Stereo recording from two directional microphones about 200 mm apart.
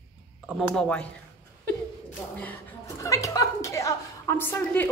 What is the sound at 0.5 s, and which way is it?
Speech, centre (ahead or behind).